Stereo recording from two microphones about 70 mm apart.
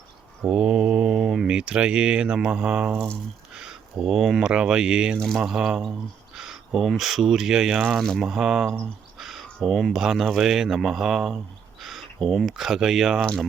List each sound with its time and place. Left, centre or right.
0.4 s speech: centre
5.1 s speech: centre
5.4 s mantra: centre
6.3 s speech: centre
8.2 s mantra: centre
9.1 s a sound: centre
9.6 s speech: centre